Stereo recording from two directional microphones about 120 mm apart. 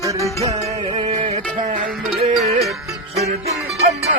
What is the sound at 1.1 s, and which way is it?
Music, 70° right (ahead or behind).